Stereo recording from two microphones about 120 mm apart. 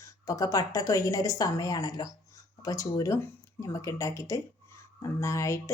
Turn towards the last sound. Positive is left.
turn(degrees=25)  # may be behind; listen again after turning